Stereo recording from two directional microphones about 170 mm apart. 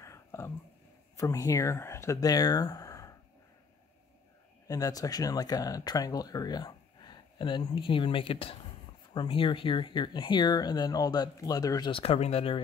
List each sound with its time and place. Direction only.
0.0 s whispering: 15° left (ahead or behind)
1.1 s speech: 20° left (ahead or behind)
4.6 s speech: 20° left (ahead or behind)
12.0 s speech: 35° left (ahead or behind)